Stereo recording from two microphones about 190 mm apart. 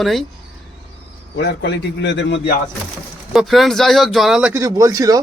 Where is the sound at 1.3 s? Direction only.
60° left (ahead or behind).